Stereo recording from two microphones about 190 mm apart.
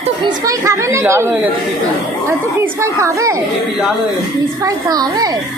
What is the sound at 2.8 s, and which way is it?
Speech, 15° right (ahead or behind).